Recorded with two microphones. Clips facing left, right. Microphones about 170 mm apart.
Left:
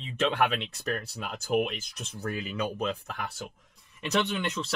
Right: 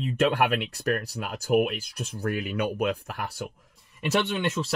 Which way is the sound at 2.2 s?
65° right (ahead or behind).